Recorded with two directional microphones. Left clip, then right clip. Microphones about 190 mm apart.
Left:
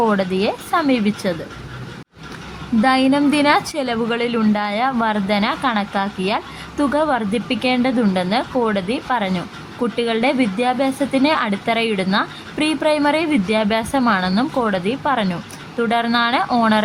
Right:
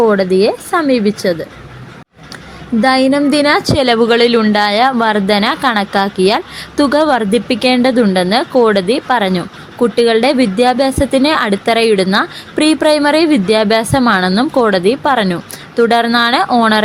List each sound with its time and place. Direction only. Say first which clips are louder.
0.0 s speech: right 8 dB; 15° right (ahead or behind)
2.8 s speech: right 5 dB; 20° right (ahead or behind)
3.8 s a woman's voice: right 11 dB; 35° right (ahead or behind)